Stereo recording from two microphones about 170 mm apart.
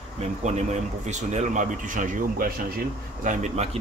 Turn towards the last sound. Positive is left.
turn(degrees=-40)  # may be behind; listen again after turning